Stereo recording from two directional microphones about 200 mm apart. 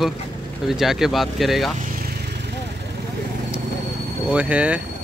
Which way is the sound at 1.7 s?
45° right (ahead or behind).